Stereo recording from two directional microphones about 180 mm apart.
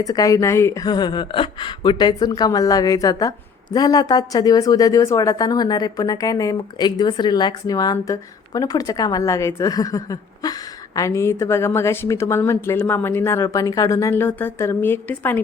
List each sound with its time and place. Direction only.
0.0 s speech: 20° left (ahead or behind)